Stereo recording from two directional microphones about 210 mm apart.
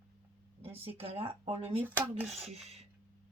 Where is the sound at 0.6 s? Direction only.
25° right (ahead or behind).